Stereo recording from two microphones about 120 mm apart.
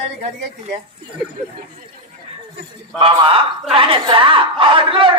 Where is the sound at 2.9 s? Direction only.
50° right (ahead or behind).